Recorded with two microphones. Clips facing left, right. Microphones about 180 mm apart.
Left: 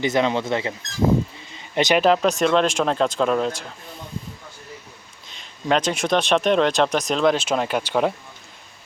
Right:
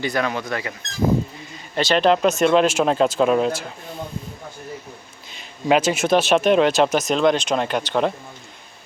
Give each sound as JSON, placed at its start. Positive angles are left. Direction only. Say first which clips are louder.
{"t": 0.0, "sound": "speech", "louder": "left 3 dB", "side_deg": 20}
{"t": 1.7, "sound": "speech", "louder": "left 1 dB", "side_deg": 15}
{"t": 2.0, "sound": "speech", "louder": "right 3 dB", "side_deg": 0}
{"t": 5.3, "sound": "speech", "louder": "right 3 dB", "side_deg": -5}